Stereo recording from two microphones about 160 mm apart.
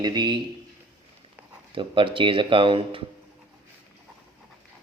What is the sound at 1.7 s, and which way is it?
Speech, 30° right (ahead or behind).